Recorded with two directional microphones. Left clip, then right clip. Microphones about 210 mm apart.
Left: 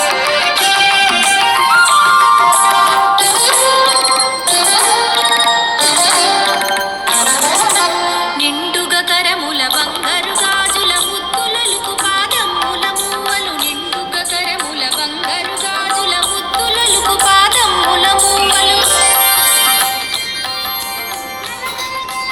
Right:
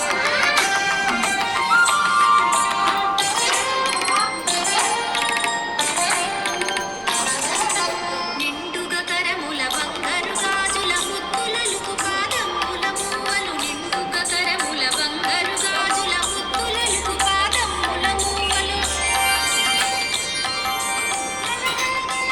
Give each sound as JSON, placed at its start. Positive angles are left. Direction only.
{"t": 0.0, "sound": "music", "side_deg": 30}
{"t": 12.0, "sound": "music", "side_deg": 40}
{"t": 16.6, "sound": "music", "side_deg": 45}